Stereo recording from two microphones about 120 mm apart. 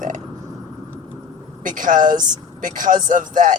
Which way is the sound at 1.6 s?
90° right.